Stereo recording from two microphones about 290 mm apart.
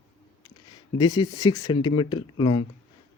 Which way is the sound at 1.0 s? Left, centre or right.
Centre.